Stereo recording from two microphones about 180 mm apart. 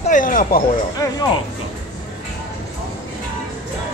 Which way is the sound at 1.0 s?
15° left (ahead or behind).